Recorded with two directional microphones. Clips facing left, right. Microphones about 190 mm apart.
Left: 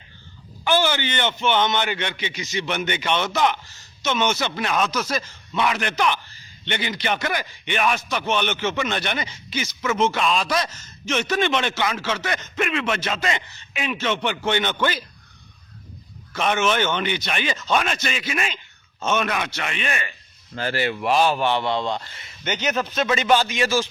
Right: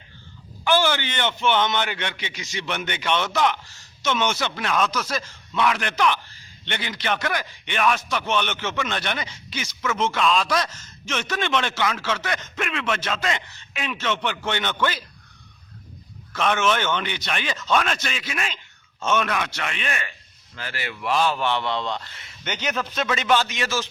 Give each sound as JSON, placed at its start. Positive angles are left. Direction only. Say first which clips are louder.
{"t": 0.6, "sound": "a man's voice", "louder": "even", "side_deg": 0}
{"t": 16.3, "sound": "a man's voice", "louder": "left 1 dB", "side_deg": 5}
{"t": 20.6, "sound": "speech", "louder": "left 9 dB", "side_deg": 30}
{"t": 21.0, "sound": "a man's voice", "louder": "left 2 dB", "side_deg": 20}